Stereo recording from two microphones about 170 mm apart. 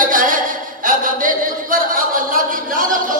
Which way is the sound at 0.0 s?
55° right (ahead or behind).